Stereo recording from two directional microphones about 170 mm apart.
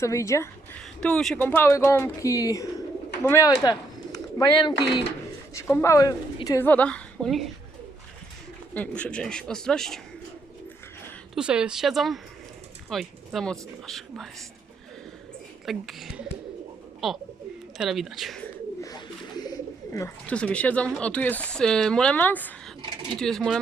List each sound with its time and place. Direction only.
0.0 s a woman's voice: 15° left (ahead or behind)
1.0 s a woman's voice: 5° left (ahead or behind)
8.7 s speech: 10° left (ahead or behind)
11.3 s speech: 5° right (ahead or behind)
15.6 s speech: centre (ahead or behind)
18.8 s speech: 20° left (ahead or behind); by 23.6 s centre (ahead or behind)